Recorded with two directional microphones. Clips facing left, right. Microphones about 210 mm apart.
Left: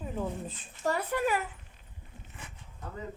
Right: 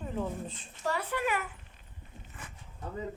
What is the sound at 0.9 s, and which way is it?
Speech, 45° left (ahead or behind).